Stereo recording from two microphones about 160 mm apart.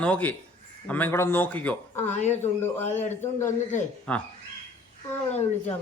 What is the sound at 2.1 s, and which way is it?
Speech, 45° left (ahead or behind).